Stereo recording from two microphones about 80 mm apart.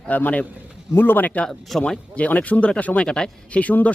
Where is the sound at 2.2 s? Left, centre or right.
Centre.